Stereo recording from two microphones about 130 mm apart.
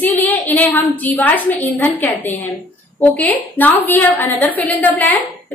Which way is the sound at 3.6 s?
15° left (ahead or behind).